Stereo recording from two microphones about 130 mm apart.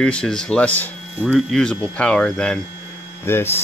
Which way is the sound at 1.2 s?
5° right (ahead or behind).